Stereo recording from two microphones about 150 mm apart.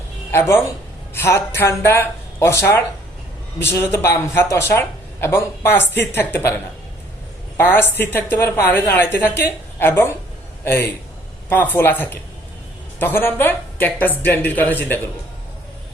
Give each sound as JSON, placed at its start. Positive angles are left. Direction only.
{"t": 0.3, "sound": "speech", "side_deg": 15}
{"t": 7.5, "sound": "a man's voice", "side_deg": 15}